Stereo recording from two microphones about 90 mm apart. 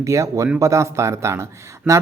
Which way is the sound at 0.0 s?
35° right (ahead or behind).